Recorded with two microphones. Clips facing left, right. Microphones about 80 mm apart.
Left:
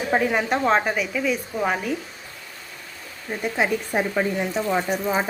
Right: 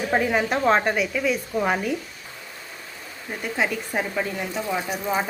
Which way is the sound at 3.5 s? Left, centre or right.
Centre.